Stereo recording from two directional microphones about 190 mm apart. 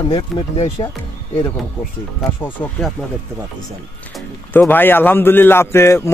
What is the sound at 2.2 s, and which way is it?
Speech, 10° left (ahead or behind).